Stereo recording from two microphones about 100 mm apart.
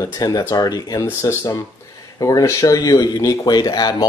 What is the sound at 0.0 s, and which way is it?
Speech, 40° left (ahead or behind).